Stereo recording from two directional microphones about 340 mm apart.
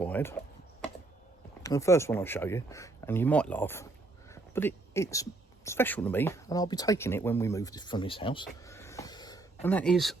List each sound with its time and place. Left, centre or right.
0.0 s speech: centre
1.6 s speech: centre